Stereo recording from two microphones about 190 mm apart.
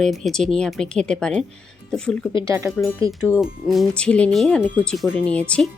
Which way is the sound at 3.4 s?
Centre (ahead or behind).